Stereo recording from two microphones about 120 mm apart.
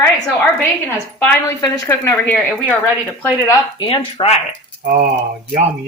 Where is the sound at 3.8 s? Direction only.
55° left (ahead or behind).